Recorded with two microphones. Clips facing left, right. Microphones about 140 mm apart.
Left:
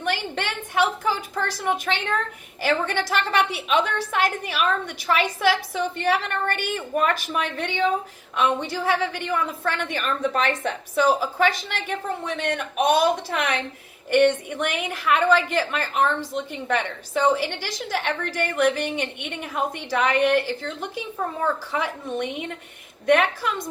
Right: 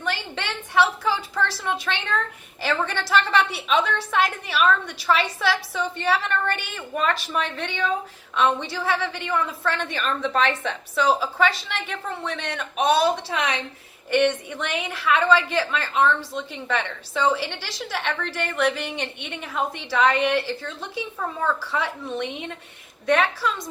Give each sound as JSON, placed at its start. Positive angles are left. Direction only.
{"t": 0.0, "sound": "a sound", "side_deg": 50}
{"t": 3.0, "sound": "a woman's voice", "side_deg": 50}
{"t": 23.4, "sound": "a woman's voice", "side_deg": 50}